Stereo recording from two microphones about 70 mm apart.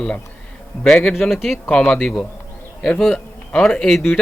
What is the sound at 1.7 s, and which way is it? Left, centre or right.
Speech, centre.